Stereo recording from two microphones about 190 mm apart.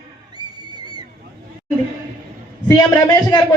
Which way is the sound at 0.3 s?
20° right (ahead or behind).